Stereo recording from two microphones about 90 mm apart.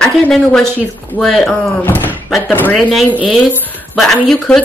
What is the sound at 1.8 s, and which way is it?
Speech, 20° left (ahead or behind).